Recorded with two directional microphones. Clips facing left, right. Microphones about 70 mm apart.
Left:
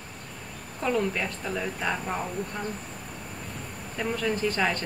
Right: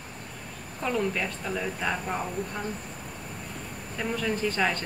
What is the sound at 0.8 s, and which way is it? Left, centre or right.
Speech, centre.